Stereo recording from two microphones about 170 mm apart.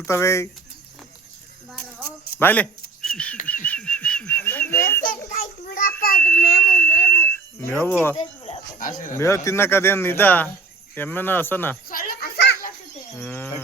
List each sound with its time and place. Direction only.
0.0 s speech: 15° left (ahead or behind)
2.4 s speech: 10° left (ahead or behind)
3.4 s a sound: 10° left (ahead or behind)
5.4 s a child's voice: 55° left (ahead or behind)
6.1 s speech: 10° left (ahead or behind)
6.6 s a sound: 10° left (ahead or behind)
7.9 s speech: 10° left (ahead or behind)
8.1 s speech: 40° left (ahead or behind)
8.8 s speech: 50° left (ahead or behind)
9.1 s speech: 15° left (ahead or behind)
11.9 s children playing: 55° left (ahead or behind)
13.1 s speech: 10° left (ahead or behind)